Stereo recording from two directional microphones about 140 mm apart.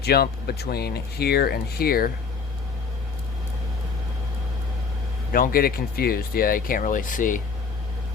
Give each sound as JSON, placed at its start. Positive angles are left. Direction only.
{"t": 0.1, "sound": "speech", "side_deg": 90}
{"t": 5.3, "sound": "speech", "side_deg": 90}